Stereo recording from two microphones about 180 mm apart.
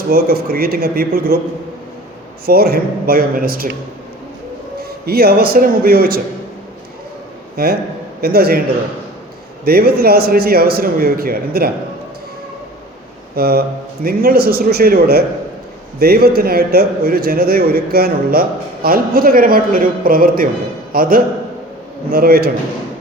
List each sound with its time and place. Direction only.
0.1 s a man's voice: 55° right (ahead or behind)
2.5 s a man's voice: 60° right (ahead or behind)
4.8 s a man's voice: 60° right (ahead or behind)
7.5 s a man's voice: 55° right (ahead or behind)
9.6 s a man's voice: 60° right (ahead or behind)
13.3 s a man's voice: 60° right (ahead or behind)